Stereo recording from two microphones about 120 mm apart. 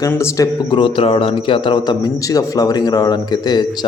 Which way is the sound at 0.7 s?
45° left (ahead or behind).